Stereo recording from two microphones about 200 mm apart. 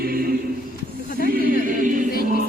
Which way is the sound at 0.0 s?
50° right (ahead or behind).